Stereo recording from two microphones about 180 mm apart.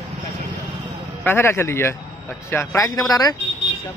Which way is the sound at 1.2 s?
10° left (ahead or behind).